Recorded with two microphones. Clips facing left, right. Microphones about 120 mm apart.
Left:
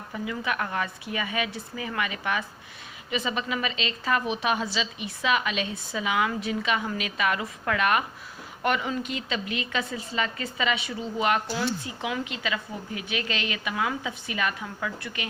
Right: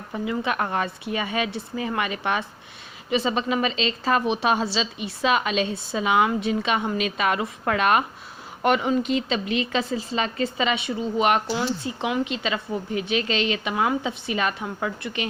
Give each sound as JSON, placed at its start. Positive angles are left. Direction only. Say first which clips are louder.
{"t": 0.1, "sound": "speech", "louder": "right 5 dB", "side_deg": -30}